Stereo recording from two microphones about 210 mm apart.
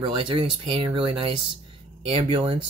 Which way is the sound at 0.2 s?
25° right (ahead or behind).